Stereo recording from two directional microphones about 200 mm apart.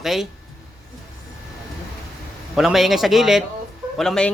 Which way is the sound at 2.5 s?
Centre (ahead or behind).